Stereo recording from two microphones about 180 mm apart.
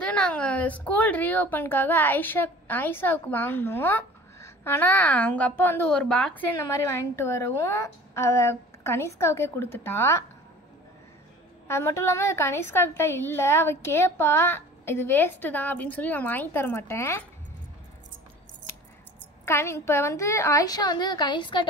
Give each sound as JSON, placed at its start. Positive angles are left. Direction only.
{"t": 0.0, "sound": "a woman's voice", "side_deg": 5}
{"t": 6.6, "sound": "a woman's voice", "side_deg": 15}
{"t": 11.6, "sound": "a woman's voice", "side_deg": 15}
{"t": 19.4, "sound": "a woman's voice", "side_deg": 15}